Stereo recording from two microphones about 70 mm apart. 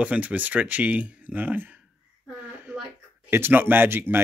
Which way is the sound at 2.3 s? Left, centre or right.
Right.